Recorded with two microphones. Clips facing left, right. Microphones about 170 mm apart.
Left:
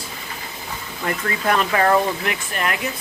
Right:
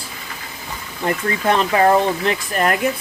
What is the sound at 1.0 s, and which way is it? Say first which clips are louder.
Speech: right 3 dB; 25° right (ahead or behind).